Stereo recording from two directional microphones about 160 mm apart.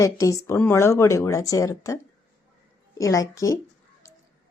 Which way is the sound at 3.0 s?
20° left (ahead or behind).